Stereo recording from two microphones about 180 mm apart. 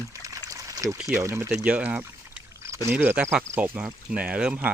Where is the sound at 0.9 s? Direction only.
5° right (ahead or behind).